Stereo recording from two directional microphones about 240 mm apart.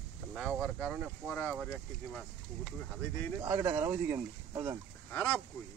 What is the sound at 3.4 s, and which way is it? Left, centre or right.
Speech, centre.